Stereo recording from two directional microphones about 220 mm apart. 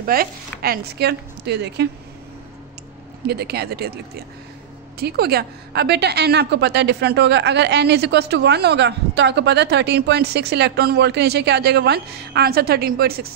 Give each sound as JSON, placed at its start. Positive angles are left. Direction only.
{"t": 0.0, "sound": "a woman's voice", "side_deg": -40}
{"t": 3.3, "sound": "a woman's voice", "side_deg": -45}
{"t": 5.0, "sound": "a woman's voice", "side_deg": -45}